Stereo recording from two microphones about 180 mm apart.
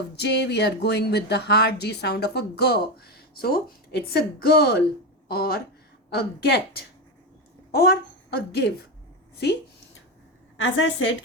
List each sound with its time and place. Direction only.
0.2 s a woman's voice: 70° left (ahead or behind)
9.4 s a sound: 65° left (ahead or behind)
10.6 s a woman's voice: 90° left